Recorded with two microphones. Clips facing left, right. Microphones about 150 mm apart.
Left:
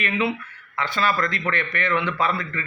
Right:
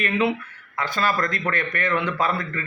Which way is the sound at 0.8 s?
45° right (ahead or behind).